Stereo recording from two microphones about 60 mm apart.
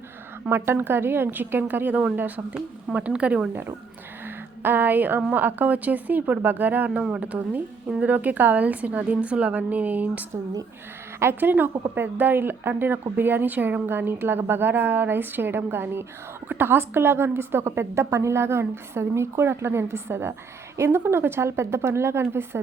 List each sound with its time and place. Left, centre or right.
0.5 s a woman's voice: right; by 3.5 s centre
4.3 s a sound: right
5.3 s a woman's voice: right
11.3 s a woman's voice: right